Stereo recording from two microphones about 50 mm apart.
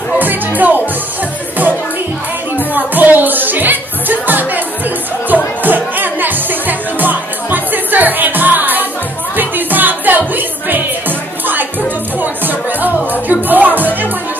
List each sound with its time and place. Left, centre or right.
0.2 s music: right
2.7 s music: right